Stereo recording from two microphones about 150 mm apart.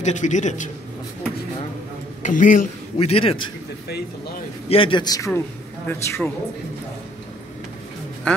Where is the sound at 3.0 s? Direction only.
40° left (ahead or behind).